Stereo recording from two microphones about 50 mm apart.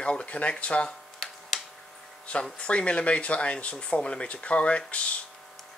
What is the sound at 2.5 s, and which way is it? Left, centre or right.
Speech, left.